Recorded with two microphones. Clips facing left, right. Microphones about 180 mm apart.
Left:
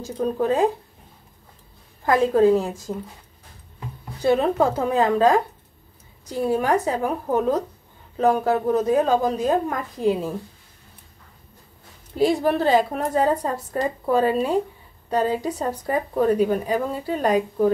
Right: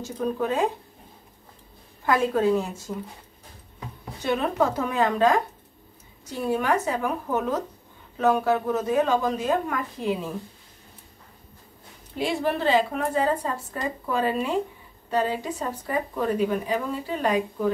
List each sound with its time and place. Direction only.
0.0 s speech: 35° left (ahead or behind)
2.0 s speech: 35° left (ahead or behind)
4.2 s speech: 30° left (ahead or behind)
12.2 s speech: 40° left (ahead or behind)